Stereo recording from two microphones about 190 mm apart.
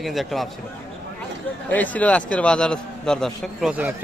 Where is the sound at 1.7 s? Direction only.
10° left (ahead or behind).